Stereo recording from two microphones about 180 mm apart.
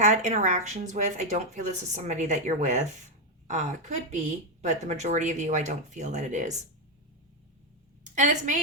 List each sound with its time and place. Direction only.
0.0 s speech: 40° right (ahead or behind)
8.1 s a woman's voice: 45° right (ahead or behind)